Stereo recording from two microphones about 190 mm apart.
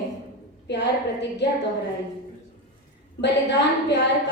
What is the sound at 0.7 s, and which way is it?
Speech, 65° left (ahead or behind).